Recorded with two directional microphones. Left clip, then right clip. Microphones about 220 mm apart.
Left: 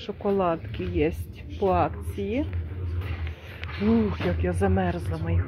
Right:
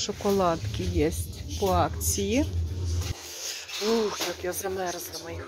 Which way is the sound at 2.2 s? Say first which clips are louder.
Right 1 dB; 15° right (ahead or behind).